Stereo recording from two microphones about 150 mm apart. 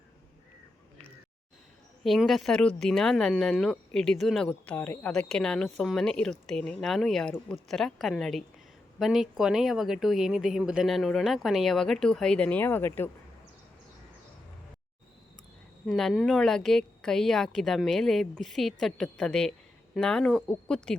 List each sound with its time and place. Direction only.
2.0 s a woman's voice: centre (ahead or behind)
15.9 s a woman's voice: centre (ahead or behind)